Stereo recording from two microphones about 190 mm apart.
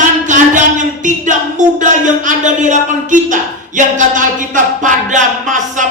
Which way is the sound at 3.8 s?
40° right (ahead or behind).